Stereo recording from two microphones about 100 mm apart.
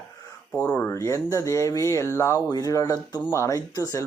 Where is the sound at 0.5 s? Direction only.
15° left (ahead or behind).